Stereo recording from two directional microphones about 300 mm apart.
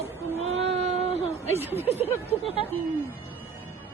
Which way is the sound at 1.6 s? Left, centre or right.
Centre.